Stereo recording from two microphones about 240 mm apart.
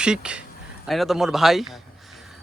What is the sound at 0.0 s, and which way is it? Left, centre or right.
Speech, centre.